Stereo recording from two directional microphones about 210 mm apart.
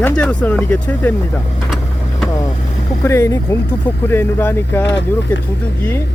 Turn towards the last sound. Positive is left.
turn(degrees=55)  # may be behind; listen again after turning